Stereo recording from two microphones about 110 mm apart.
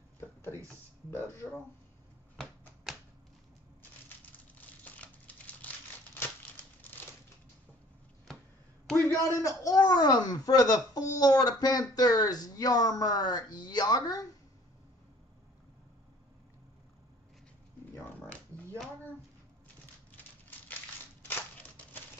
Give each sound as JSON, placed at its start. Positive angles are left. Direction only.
{"t": 1.1, "sound": "speech", "side_deg": 25}
{"t": 2.3, "sound": "typewriter", "side_deg": 0}
{"t": 4.8, "sound": "crumpling", "side_deg": 15}
{"t": 9.1, "sound": "a man's voice", "side_deg": 30}
{"t": 17.9, "sound": "a sound", "side_deg": 15}
{"t": 20.1, "sound": "a sound", "side_deg": 15}
{"t": 21.2, "sound": "crushing", "side_deg": 20}